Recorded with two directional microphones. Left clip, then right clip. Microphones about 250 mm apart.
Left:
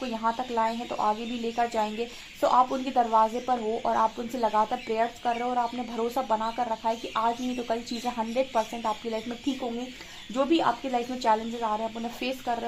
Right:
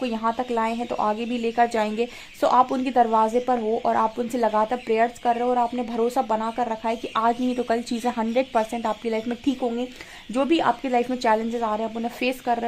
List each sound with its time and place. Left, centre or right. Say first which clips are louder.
0.0 s a woman's voice: right 4 dB; right
10.3 s a woman's voice: right 3 dB; right